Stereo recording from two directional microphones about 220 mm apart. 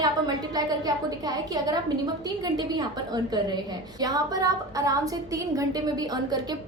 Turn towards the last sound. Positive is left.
turn(degrees=-15)  # may be behind; listen again after turning